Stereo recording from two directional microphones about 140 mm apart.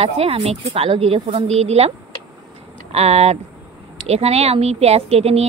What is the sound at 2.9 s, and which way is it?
Speech, 50° right (ahead or behind).